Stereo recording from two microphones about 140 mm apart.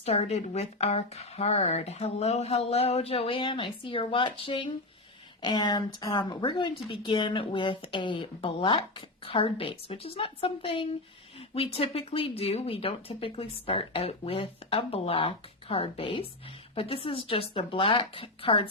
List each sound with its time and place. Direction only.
0.0 s speech: 45° left (ahead or behind)